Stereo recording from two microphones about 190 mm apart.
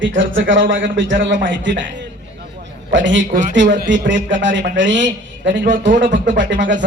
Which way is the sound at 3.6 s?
45° right (ahead or behind).